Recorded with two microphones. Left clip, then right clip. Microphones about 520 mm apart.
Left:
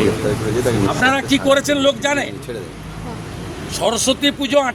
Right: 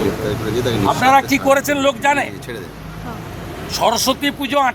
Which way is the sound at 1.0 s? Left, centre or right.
Right.